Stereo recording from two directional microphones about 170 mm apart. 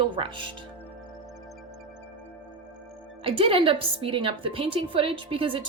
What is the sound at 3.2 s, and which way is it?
A woman's voice, 30° right (ahead or behind).